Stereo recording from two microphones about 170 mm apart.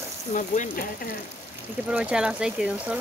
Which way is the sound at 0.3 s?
45° left (ahead or behind).